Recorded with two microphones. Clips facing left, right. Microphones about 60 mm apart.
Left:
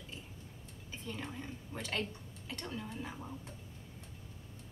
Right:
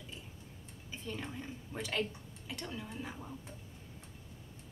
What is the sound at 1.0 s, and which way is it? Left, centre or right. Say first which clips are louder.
Speech: right 1 dB; centre.